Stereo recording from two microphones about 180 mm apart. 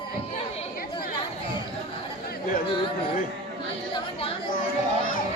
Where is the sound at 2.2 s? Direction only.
55° left (ahead or behind).